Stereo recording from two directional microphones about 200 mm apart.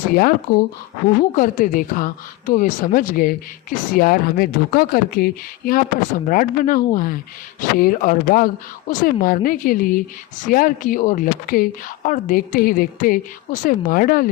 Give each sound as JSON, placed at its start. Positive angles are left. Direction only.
{"t": 0.1, "sound": "a woman's voice", "side_deg": 45}